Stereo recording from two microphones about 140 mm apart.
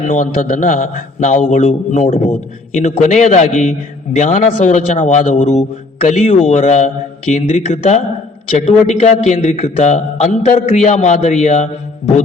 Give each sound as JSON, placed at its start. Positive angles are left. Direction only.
{"t": 0.1, "sound": "a man's voice", "side_deg": 65}
{"t": 2.7, "sound": "a man's voice", "side_deg": 60}